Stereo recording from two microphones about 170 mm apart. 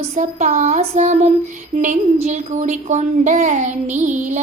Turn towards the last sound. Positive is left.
turn(degrees=-45)  # may be behind; listen again after turning